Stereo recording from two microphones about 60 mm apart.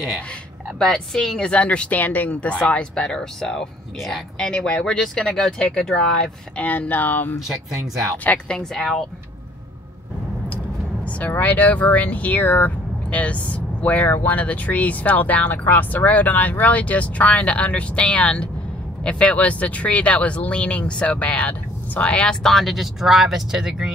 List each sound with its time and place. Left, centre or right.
0.7 s speech: centre
1.5 s speech: centre
6.6 s speech: left
8.5 s speech: centre
11.1 s speech: left; by 23.9 s centre